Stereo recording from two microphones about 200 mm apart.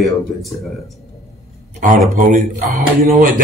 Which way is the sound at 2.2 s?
40° right (ahead or behind).